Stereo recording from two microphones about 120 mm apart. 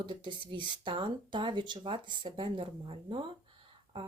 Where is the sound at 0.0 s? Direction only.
45° right (ahead or behind).